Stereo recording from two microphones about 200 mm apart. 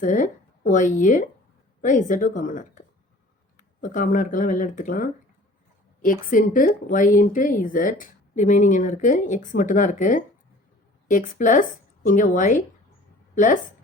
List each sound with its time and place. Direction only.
0.0 s speech: 40° left (ahead or behind)